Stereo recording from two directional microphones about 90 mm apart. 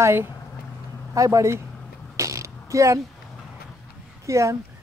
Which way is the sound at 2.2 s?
35° right (ahead or behind).